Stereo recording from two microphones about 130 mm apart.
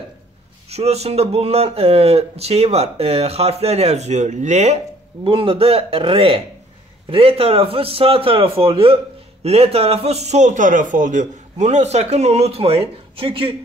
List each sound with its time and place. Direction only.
0.7 s a man's voice: 55° right (ahead or behind)
5.2 s a man's voice: 45° right (ahead or behind)